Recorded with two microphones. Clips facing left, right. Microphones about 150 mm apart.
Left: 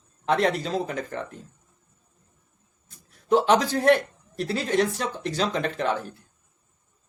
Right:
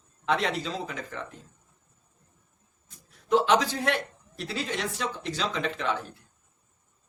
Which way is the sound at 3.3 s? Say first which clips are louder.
Left 3 dB; 45° left (ahead or behind).